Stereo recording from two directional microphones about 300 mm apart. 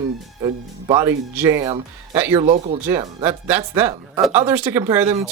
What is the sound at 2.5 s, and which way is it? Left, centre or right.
Speech, right.